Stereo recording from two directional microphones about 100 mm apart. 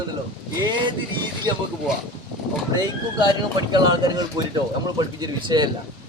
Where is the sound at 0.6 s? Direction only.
50° right (ahead or behind).